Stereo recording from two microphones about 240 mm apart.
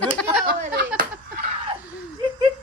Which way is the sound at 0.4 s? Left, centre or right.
Right.